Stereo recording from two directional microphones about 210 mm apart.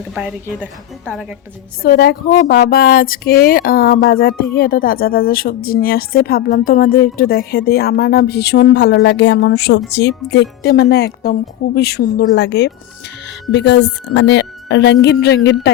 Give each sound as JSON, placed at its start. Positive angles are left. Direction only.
{"t": 0.1, "sound": "a woman's voice", "side_deg": -5}
{"t": 1.8, "sound": "a woman's voice", "side_deg": 45}